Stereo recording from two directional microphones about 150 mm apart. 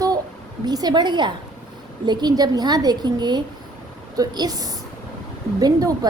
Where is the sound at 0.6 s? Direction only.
25° right (ahead or behind).